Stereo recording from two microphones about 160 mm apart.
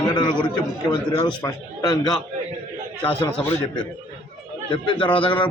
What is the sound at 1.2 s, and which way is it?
Speech, 20° left (ahead or behind).